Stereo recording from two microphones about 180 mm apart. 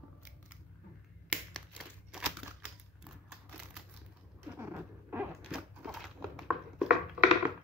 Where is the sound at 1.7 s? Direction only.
5° right (ahead or behind).